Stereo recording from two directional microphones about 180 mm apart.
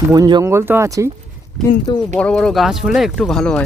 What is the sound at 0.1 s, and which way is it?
Speech, 20° right (ahead or behind).